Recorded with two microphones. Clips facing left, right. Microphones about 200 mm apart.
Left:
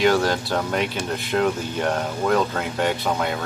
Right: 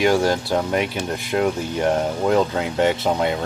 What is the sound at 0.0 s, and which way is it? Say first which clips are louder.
Speech: right 1 dB; 15° right (ahead or behind).